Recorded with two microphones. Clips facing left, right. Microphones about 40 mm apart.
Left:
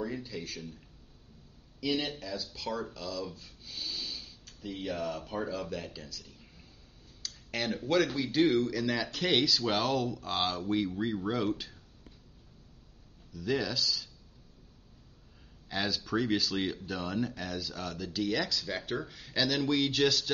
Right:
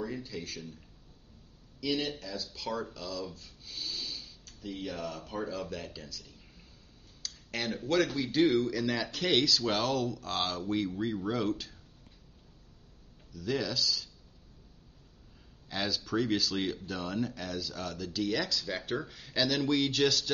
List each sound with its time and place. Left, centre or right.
0.0 s speech: centre
1.8 s speech: centre
13.3 s speech: centre
15.7 s speech: centre